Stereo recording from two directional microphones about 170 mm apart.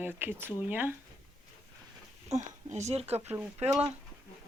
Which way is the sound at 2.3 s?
40° right (ahead or behind).